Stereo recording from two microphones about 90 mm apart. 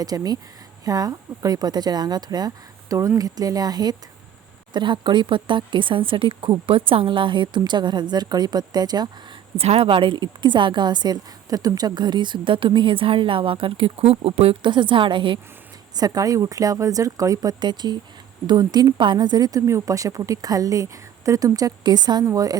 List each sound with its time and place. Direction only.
0.0 s a woman's voice: 45° right (ahead or behind)
9.6 s a woman's voice: 80° right
16.0 s a woman's voice: 45° right (ahead or behind)